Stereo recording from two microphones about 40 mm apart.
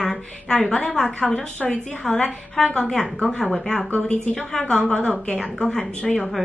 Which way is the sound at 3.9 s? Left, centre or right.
Left.